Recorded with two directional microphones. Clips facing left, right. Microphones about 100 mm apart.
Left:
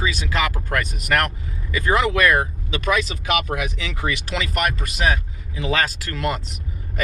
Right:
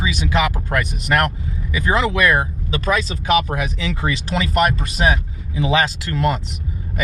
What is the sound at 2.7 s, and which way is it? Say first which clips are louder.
Speech: right 2 dB; 35° right (ahead or behind).